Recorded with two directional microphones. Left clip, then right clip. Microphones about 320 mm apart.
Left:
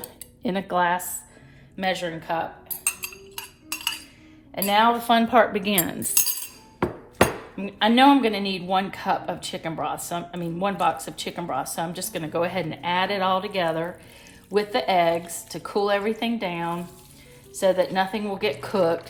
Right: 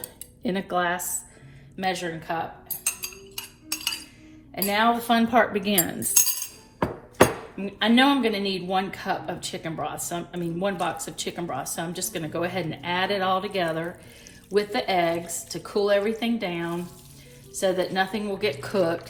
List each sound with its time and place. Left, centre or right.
0.4 s speech: left
3.3 s cutlery: centre
4.5 s speech: left
7.5 s speech: left